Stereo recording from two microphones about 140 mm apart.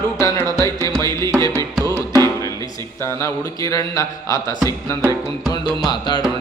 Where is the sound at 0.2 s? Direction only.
20° left (ahead or behind).